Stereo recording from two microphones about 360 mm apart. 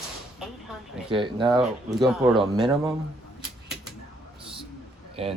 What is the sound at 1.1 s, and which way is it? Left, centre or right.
Speech, centre.